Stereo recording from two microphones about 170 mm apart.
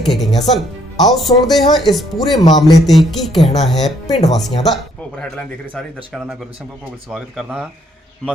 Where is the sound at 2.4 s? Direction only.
25° left (ahead or behind).